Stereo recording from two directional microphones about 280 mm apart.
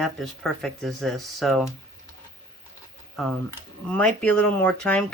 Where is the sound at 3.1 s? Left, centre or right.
Centre.